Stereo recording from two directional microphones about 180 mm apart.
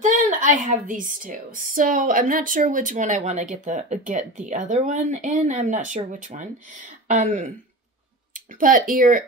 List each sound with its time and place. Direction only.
0.0 s a woman's voice: 45° right (ahead or behind)
8.5 s a woman's voice: 50° right (ahead or behind)